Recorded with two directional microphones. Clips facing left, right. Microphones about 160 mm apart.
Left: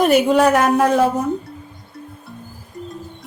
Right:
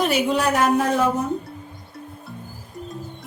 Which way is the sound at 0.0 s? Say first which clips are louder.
Left 7 dB; 50° left (ahead or behind).